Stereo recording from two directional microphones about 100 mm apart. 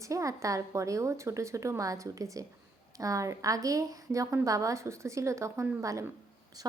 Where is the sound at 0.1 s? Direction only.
35° right (ahead or behind).